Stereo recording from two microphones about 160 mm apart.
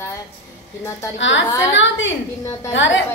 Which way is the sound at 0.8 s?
15° left (ahead or behind).